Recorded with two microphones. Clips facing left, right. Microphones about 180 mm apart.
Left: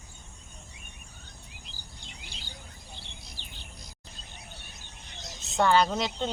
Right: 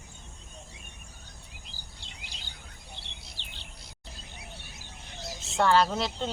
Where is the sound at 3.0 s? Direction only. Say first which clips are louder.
Left 1 dB; 75° right (ahead or behind).